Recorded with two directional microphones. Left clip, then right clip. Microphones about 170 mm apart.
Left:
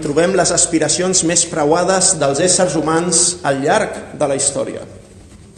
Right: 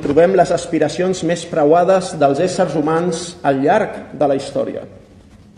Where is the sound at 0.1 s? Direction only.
20° right (ahead or behind).